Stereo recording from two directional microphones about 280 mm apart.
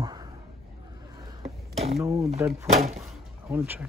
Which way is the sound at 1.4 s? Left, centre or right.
Right.